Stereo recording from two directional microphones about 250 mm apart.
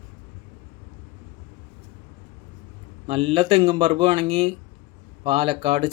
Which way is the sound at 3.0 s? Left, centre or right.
Right.